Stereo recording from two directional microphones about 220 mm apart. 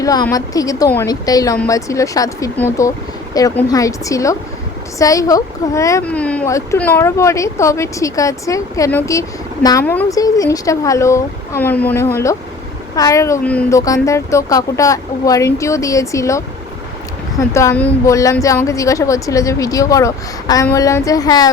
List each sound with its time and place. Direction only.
0.0 s speech: 15° left (ahead or behind)
17.5 s speech: 15° left (ahead or behind)